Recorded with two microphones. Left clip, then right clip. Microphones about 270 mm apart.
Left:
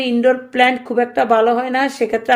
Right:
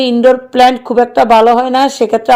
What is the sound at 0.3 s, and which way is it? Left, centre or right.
A woman's voice, right.